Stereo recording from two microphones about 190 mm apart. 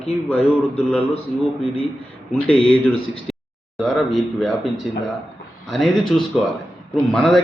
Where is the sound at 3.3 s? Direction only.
Centre (ahead or behind).